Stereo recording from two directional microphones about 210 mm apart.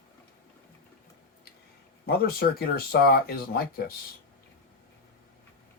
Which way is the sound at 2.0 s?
45° left (ahead or behind).